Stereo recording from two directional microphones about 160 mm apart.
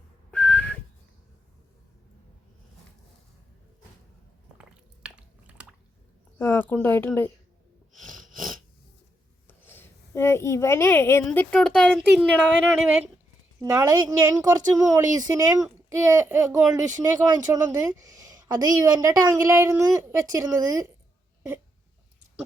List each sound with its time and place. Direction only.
0.3 s whistling: 5° left (ahead or behind)
5.0 s chewing: 5° right (ahead or behind)
6.4 s speech: 15° left (ahead or behind)
7.9 s a sound: 5° left (ahead or behind)
9.5 s a woman's voice: 10° left (ahead or behind)
13.6 s a woman's voice: 20° right (ahead or behind)